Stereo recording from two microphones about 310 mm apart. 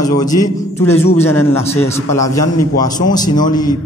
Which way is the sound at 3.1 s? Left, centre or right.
Centre.